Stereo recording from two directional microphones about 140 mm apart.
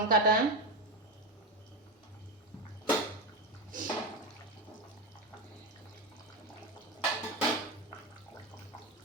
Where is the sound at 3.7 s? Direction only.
75° right (ahead or behind).